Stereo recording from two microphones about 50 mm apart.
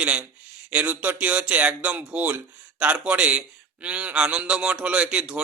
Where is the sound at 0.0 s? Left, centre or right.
Right.